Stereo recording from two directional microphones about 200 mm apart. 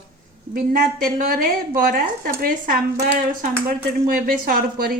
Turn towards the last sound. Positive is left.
turn(degrees=-45)  # may be behind; listen again after turning